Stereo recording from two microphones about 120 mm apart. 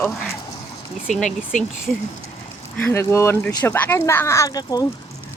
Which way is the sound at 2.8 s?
20° left (ahead or behind).